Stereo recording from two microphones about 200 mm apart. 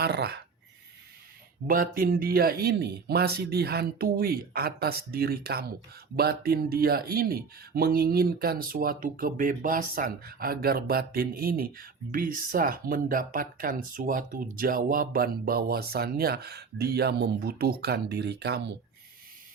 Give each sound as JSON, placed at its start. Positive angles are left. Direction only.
{"t": 0.0, "sound": "speech", "side_deg": -55}
{"t": 1.6, "sound": "speech", "side_deg": -45}